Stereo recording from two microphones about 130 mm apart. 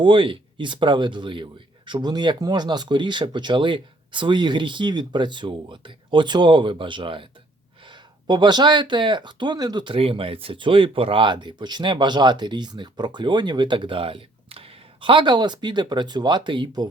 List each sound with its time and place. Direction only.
0.0 s speech: 40° right (ahead or behind)